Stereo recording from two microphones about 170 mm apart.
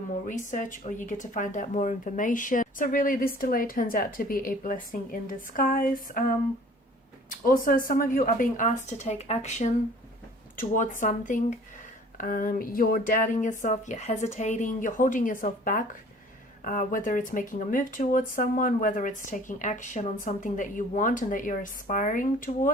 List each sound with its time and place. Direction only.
0.3 s speech: 50° left (ahead or behind)
7.3 s speech: 55° left (ahead or behind)